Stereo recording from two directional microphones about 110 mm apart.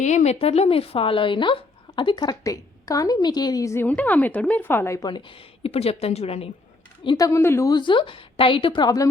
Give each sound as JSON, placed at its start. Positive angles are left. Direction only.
{"t": 0.0, "sound": "a woman's voice", "side_deg": 90}
{"t": 2.2, "sound": "a woman's voice", "side_deg": 30}
{"t": 3.8, "sound": "speech", "side_deg": 15}
{"t": 5.0, "sound": "a woman's voice", "side_deg": 40}
{"t": 5.6, "sound": "a woman's voice", "side_deg": 65}
{"t": 7.2, "sound": "a woman's voice", "side_deg": 30}
{"t": 7.7, "sound": "a woman's voice", "side_deg": 45}